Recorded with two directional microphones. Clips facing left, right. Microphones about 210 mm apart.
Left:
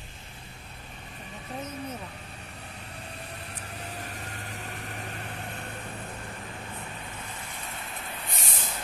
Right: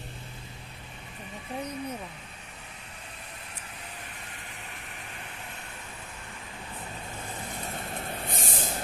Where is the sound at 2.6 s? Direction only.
35° left (ahead or behind).